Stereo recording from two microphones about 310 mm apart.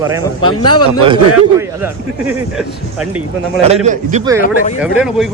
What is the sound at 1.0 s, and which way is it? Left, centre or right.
A man's voice, centre.